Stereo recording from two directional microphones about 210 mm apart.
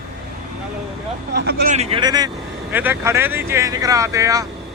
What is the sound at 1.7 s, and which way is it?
Speech, 30° right (ahead or behind).